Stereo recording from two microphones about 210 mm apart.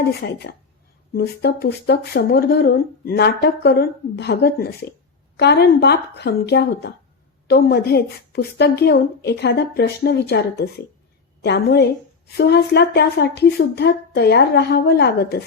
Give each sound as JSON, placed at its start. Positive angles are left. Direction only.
{"t": 0.0, "sound": "speech", "side_deg": 50}